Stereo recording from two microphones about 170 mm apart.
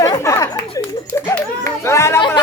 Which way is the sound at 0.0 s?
20° left (ahead or behind).